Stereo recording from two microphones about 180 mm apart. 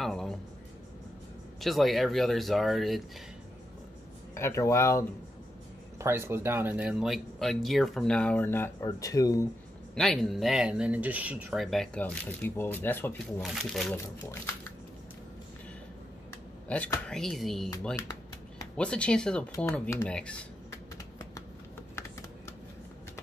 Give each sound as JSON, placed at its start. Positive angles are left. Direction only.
{"t": 0.0, "sound": "a sound", "side_deg": 0}
{"t": 1.6, "sound": "speech", "side_deg": 0}
{"t": 4.4, "sound": "speech", "side_deg": 15}
{"t": 5.9, "sound": "speech", "side_deg": -15}
{"t": 9.9, "sound": "speech", "side_deg": 0}
{"t": 13.4, "sound": "speech", "side_deg": 0}
{"t": 13.9, "sound": "speech", "side_deg": 15}
{"t": 16.6, "sound": "speech", "side_deg": 5}
{"t": 18.8, "sound": "speech", "side_deg": 5}
{"t": 19.5, "sound": "typing", "side_deg": 15}